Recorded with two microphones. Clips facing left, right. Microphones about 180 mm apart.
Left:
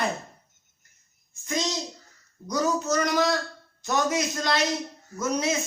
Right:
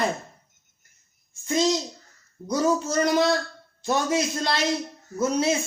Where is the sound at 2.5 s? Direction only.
30° right (ahead or behind).